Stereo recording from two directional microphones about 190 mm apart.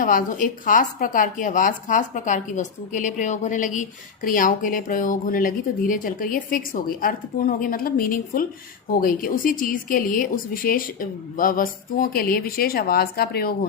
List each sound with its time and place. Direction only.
0.0 s speech: 45° left (ahead or behind)